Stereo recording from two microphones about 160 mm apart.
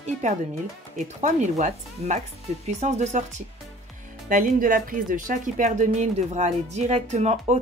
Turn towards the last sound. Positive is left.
turn(degrees=-45)  # may be behind; listen again after turning